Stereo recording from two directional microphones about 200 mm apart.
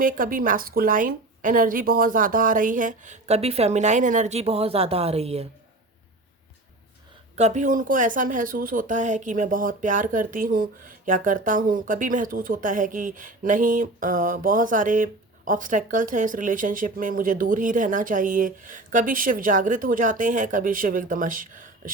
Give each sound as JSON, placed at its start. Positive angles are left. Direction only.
{"t": 0.0, "sound": "speech", "side_deg": -45}
{"t": 7.3, "sound": "speech", "side_deg": -35}